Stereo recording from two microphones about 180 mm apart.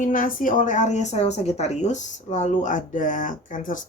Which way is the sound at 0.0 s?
50° left (ahead or behind).